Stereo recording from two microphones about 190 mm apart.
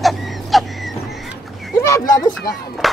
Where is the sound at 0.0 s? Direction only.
Centre (ahead or behind).